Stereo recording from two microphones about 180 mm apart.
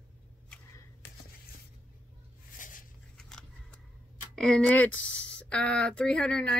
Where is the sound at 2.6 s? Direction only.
45° left (ahead or behind).